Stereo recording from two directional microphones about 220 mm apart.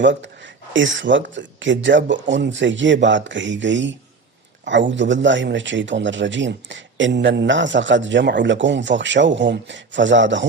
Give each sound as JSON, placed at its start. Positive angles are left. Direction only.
{"t": 0.0, "sound": "speech", "side_deg": -55}